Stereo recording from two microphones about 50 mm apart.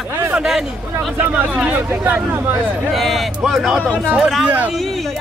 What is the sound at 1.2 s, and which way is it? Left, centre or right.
Speech, right.